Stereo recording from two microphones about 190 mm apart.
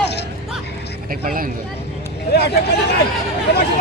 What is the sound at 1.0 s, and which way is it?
Speech, 50° right (ahead or behind).